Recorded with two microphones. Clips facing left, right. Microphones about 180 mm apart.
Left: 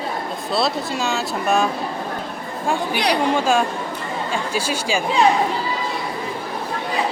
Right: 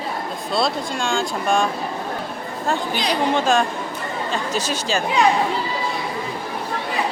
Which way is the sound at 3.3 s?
10° left (ahead or behind).